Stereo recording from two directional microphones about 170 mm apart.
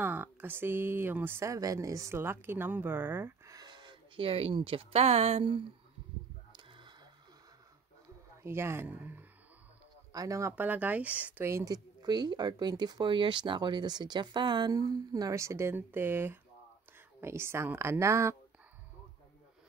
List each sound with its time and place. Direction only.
0.0 s speech: 10° right (ahead or behind); by 5.7 s 30° right (ahead or behind)
6.5 s a sound: 30° right (ahead or behind)
8.4 s speech: 15° right (ahead or behind)